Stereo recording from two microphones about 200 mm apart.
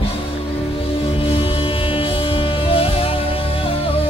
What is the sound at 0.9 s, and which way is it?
Music, 30° left (ahead or behind).